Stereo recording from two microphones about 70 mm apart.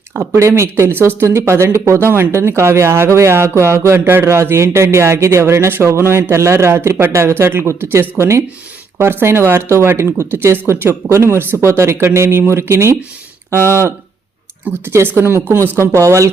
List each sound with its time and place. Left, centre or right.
0.2 s speech: right
15.2 s a woman's voice: right